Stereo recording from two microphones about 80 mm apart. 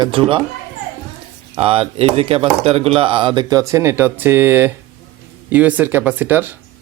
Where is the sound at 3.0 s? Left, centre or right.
Right.